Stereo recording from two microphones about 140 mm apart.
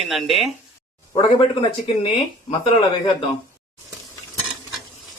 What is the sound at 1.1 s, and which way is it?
Speech, 40° left (ahead or behind).